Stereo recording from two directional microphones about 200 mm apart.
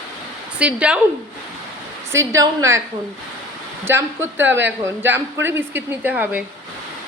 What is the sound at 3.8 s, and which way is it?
Speech, 10° right (ahead or behind).